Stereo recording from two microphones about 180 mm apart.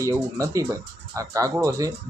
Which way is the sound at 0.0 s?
15° right (ahead or behind).